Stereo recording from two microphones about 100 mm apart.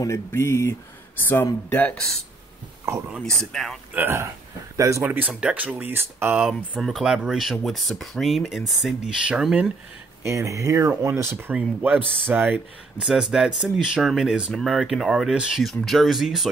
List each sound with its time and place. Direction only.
0.0 s speech: 25° left (ahead or behind)
3.5 s speech: 5° left (ahead or behind)
3.9 s speech: 25° right (ahead or behind)
5.3 s speech: 10° right (ahead or behind)
6.8 s speech: 5° right (ahead or behind)
10.2 s speech: 30° right (ahead or behind)
11.3 s speech: 15° right (ahead or behind)
13.0 s speech: 5° right (ahead or behind)